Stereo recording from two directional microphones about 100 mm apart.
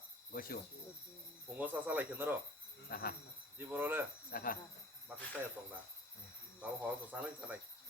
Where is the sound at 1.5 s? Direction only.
20° right (ahead or behind).